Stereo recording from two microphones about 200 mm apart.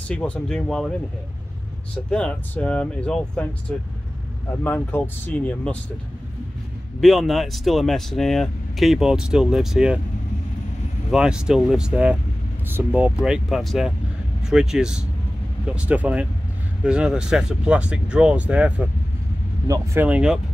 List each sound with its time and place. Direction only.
0.1 s speech: 5° left (ahead or behind)
2.0 s speech: 5° left (ahead or behind)
4.6 s speech: 10° left (ahead or behind)
7.0 s speech: centre (ahead or behind)
11.1 s speech: 5° right (ahead or behind)